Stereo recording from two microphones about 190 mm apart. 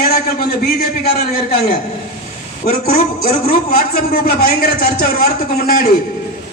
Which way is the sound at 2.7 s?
50° left (ahead or behind).